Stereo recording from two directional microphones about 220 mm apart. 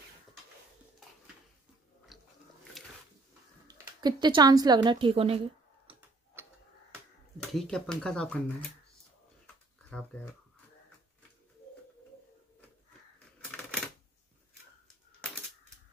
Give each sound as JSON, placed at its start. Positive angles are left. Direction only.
{"t": 2.1, "sound": "biting", "side_deg": 0}
{"t": 2.8, "sound": "dog", "side_deg": 0}
{"t": 3.6, "sound": "a woman's voice", "side_deg": -20}
{"t": 6.4, "sound": "tick-tock", "side_deg": -10}
{"t": 7.5, "sound": "speech", "side_deg": 5}